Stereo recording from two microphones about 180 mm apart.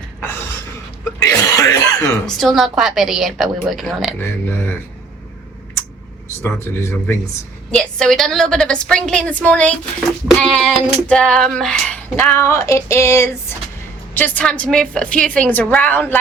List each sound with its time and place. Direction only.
1.2 s throat clearing: 15° left (ahead or behind)
2.2 s a woman's voice: centre (ahead or behind)
4.2 s female singing: 10° left (ahead or behind)
6.2 s female singing: 15° left (ahead or behind)
7.7 s a woman's voice: 5° left (ahead or behind)
10.4 s female singing: centre (ahead or behind)